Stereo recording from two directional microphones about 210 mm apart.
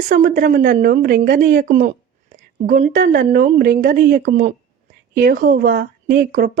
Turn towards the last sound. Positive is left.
turn(degrees=-45)  # may be behind; listen again after turning